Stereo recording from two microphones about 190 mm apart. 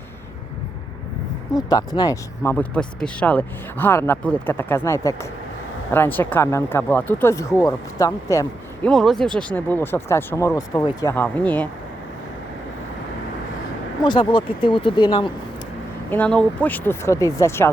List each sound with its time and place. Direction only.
1.5 s speech: 20° left (ahead or behind)
8.8 s speech: centre (ahead or behind)
14.0 s speech: 25° left (ahead or behind)
16.0 s speech: 10° left (ahead or behind)